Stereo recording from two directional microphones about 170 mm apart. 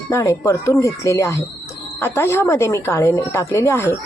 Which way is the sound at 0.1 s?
15° left (ahead or behind).